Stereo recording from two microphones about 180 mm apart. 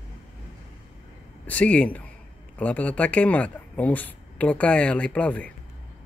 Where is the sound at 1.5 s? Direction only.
10° left (ahead or behind).